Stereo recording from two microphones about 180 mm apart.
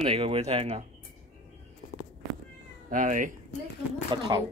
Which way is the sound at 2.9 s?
45° right (ahead or behind).